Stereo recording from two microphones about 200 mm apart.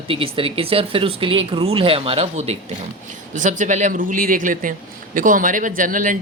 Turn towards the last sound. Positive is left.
turn(degrees=-40)  # may be behind; listen again after turning